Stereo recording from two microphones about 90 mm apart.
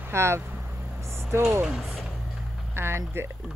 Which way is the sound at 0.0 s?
30° right (ahead or behind).